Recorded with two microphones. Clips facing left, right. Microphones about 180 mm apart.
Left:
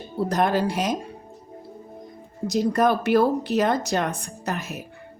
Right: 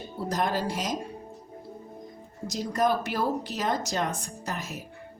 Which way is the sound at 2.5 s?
60° left (ahead or behind).